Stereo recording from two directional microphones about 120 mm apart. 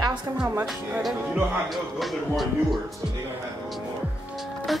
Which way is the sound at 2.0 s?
Centre (ahead or behind).